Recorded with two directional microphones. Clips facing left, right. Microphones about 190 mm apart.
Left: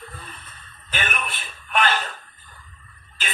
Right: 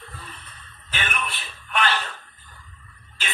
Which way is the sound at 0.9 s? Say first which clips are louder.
Left 1 dB; 45° left (ahead or behind).